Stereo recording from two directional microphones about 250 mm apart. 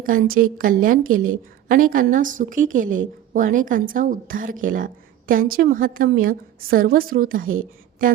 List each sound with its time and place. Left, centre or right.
0.0 s a woman's voice: right